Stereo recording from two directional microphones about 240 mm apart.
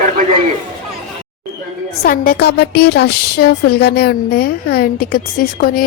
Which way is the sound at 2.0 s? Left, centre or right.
Left.